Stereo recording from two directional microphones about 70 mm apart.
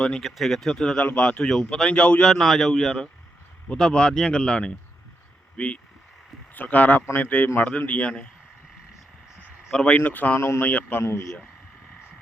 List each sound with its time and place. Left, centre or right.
0.0 s a man's voice: centre
0.9 s a man's voice: centre
9.7 s speech: centre
10.0 s a man's voice: left
11.0 s speech: left